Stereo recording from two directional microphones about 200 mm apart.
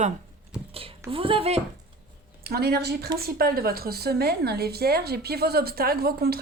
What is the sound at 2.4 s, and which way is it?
A woman's voice, 50° right (ahead or behind).